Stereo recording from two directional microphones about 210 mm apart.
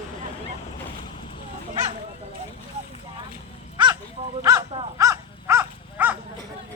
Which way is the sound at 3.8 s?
20° right (ahead or behind).